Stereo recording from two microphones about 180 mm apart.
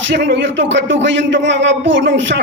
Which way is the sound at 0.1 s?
90° right.